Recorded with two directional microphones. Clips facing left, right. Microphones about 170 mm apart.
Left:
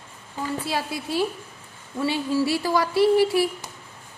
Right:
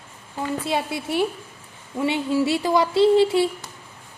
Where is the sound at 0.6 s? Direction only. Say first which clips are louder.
Right 3 dB; 25° right (ahead or behind).